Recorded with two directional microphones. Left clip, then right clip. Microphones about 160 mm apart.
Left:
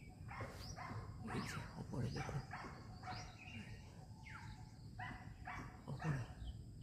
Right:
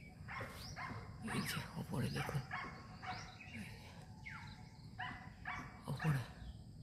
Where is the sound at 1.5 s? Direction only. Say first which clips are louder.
Right 5 dB; 30° right (ahead or behind).